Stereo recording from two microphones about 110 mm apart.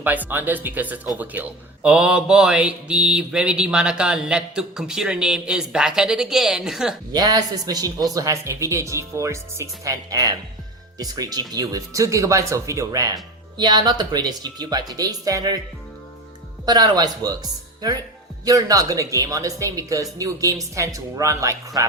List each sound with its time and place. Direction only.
0.0 s speech: 15° right (ahead or behind)
7.1 s speech: 35° right (ahead or behind)
16.6 s speech: 40° right (ahead or behind)